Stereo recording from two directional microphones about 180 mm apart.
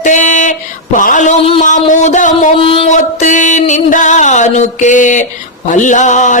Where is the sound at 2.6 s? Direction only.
30° left (ahead or behind).